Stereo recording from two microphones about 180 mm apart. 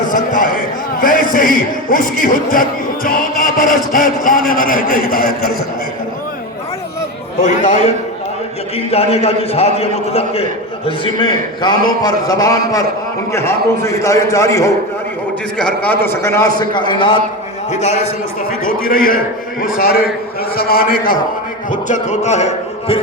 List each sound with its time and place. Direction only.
0.1 s a man's voice: 50° left (ahead or behind)
7.4 s a man's voice: 40° left (ahead or behind)
17.7 s a man's voice: 40° left (ahead or behind)
18.6 s a man's voice: 50° left (ahead or behind)
20.6 s a man's voice: 55° left (ahead or behind); by 23.0 s 40° left (ahead or behind)